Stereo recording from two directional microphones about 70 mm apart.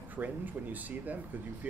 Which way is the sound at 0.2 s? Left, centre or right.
Right.